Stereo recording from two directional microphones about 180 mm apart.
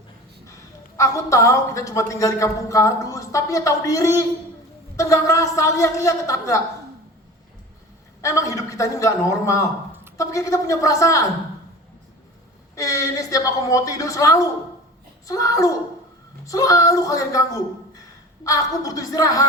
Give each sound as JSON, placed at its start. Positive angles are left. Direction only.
{"t": 0.9, "sound": "a woman's voice", "side_deg": 15}
{"t": 8.2, "sound": "a woman's voice", "side_deg": 15}
{"t": 12.7, "sound": "a woman's voice", "side_deg": 20}